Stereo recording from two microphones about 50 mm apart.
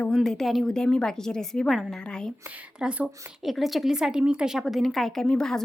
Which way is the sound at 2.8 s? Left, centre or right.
Centre.